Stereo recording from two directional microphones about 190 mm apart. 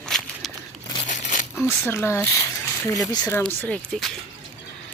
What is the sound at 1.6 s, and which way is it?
Speech, 10° left (ahead or behind).